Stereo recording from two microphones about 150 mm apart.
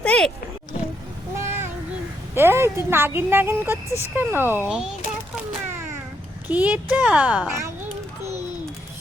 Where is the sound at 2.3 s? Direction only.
15° right (ahead or behind).